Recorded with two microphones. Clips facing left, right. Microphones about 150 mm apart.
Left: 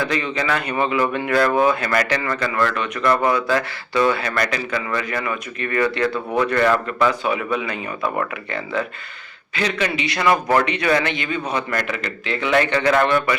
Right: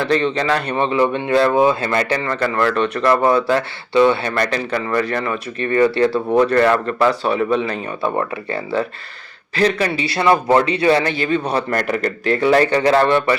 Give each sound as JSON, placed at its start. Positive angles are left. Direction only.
{"t": 0.1, "sound": "speech", "side_deg": -35}
{"t": 11.9, "sound": "speech", "side_deg": -45}